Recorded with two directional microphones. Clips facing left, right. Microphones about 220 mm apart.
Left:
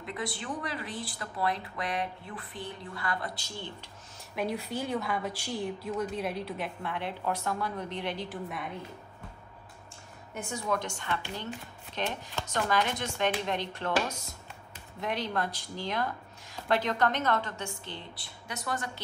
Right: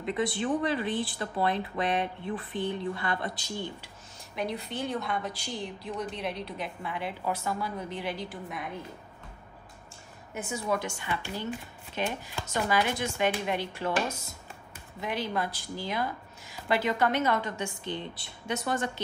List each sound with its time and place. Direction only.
0.0 s speech: 25° right (ahead or behind)
4.4 s a woman's voice: 5° left (ahead or behind)
10.3 s a woman's voice: 5° right (ahead or behind)
15.0 s a woman's voice: 5° right (ahead or behind); by 18.9 s 25° right (ahead or behind)